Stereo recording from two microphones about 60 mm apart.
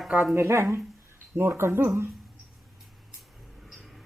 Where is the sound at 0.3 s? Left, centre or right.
Right.